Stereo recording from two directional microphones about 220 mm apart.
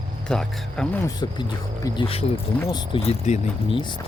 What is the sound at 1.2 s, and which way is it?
Speech, 20° left (ahead or behind).